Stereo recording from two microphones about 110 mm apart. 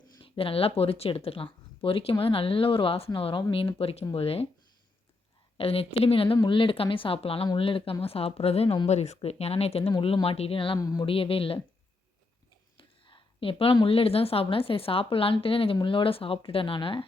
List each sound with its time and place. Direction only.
0.2 s a woman's voice: 55° left (ahead or behind)
5.5 s a woman's voice: 60° left (ahead or behind)
8.9 s a woman's voice: 80° left; by 10.8 s 55° left (ahead or behind)
10.8 s a sound: 35° left (ahead or behind)
11.0 s a woman's voice: 55° left (ahead or behind)
12.7 s a woman's voice: 50° left (ahead or behind)